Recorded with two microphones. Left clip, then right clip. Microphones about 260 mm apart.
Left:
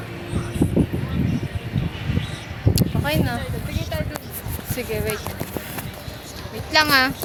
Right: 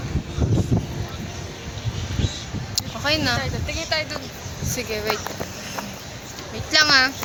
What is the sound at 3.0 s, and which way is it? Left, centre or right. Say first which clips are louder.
Speech: right 5 dB; centre.